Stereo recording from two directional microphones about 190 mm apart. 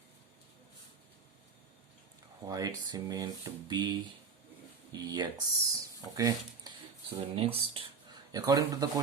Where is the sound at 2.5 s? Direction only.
20° right (ahead or behind).